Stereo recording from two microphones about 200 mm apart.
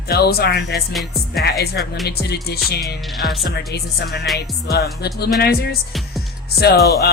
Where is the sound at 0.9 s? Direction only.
Centre (ahead or behind).